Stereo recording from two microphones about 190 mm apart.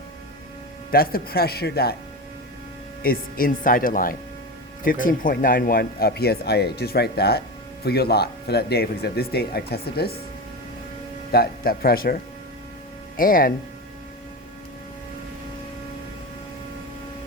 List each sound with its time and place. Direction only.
0.9 s speech: 50° left (ahead or behind)
3.0 s speech: 50° left (ahead or behind)
11.3 s speech: 55° left (ahead or behind)